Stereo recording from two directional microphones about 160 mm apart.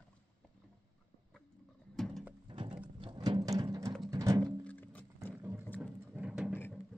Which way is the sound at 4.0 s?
20° right (ahead or behind).